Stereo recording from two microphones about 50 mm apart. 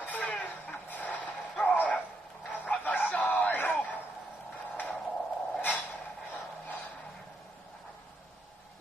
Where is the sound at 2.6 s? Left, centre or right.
Left.